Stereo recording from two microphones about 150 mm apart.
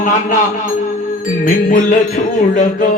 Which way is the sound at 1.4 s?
65° left (ahead or behind).